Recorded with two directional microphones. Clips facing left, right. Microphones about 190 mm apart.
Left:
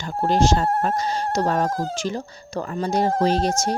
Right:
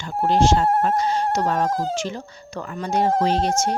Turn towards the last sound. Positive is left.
turn(degrees=40)  # may be behind; listen again after turning